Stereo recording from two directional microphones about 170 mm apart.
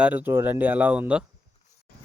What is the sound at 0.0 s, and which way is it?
Speech, 10° right (ahead or behind).